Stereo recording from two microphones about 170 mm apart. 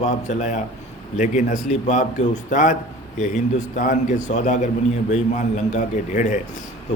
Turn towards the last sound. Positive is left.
turn(degrees=45)  # may be behind; listen again after turning